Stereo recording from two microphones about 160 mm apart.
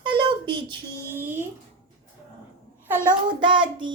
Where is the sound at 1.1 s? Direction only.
15° right (ahead or behind).